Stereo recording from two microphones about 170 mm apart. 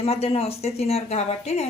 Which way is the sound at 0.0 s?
35° left (ahead or behind).